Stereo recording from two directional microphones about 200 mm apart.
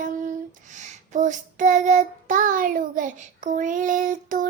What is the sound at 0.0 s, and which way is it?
Child singing, 40° right (ahead or behind).